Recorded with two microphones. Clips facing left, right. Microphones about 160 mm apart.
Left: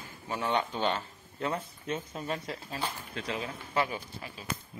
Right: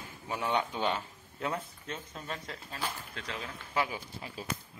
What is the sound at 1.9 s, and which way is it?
Speech, 10° left (ahead or behind).